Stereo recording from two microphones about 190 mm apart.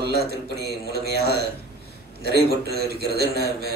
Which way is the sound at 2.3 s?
55° right (ahead or behind).